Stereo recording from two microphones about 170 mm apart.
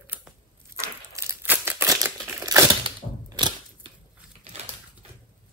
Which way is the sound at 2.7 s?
30° right (ahead or behind).